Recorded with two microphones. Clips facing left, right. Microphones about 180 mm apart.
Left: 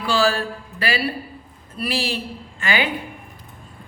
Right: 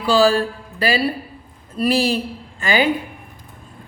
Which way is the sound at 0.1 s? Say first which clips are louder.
Right 5 dB; 35° right (ahead or behind).